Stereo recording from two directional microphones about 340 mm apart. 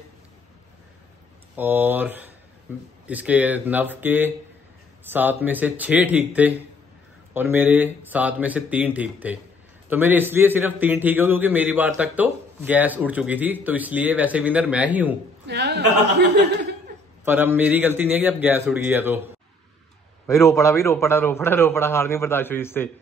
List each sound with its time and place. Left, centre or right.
1.6 s a man's voice: centre
15.4 s a man's voice: right
17.2 s a man's voice: centre
20.2 s a man's voice: centre